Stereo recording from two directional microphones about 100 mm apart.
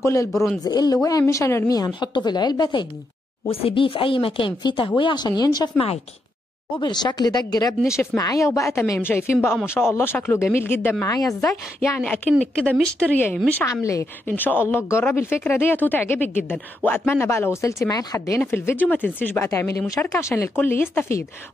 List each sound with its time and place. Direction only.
0.0 s speech: 30° left (ahead or behind)
0.3 s a man's voice: centre (ahead or behind)
0.7 s speech: 40° left (ahead or behind)
1.2 s speech: 30° left (ahead or behind)
2.0 s a woman's voice: 50° left (ahead or behind)
3.4 s speech: 75° left (ahead or behind); by 5.7 s 40° left (ahead or behind)
6.8 s a woman's voice: 45° left (ahead or behind); by 12.0 s 30° left (ahead or behind)
12.0 s a man's voice: 5° left (ahead or behind)
13.7 s speech: 30° left (ahead or behind)
14.2 s speech: 20° left (ahead or behind)
18.4 s speech: 20° left (ahead or behind)